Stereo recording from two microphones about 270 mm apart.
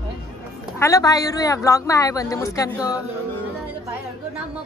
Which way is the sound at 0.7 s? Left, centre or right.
Centre.